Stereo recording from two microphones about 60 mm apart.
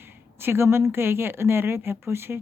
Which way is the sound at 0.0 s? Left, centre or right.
Right.